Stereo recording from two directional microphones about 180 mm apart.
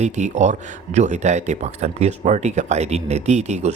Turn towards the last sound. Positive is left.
turn(degrees=-40)  # may be behind; listen again after turning